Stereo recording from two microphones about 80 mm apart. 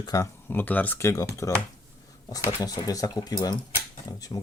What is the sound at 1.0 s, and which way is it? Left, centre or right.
Speech, left.